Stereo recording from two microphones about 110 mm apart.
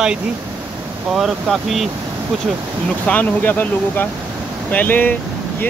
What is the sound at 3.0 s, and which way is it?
Speech, 15° left (ahead or behind).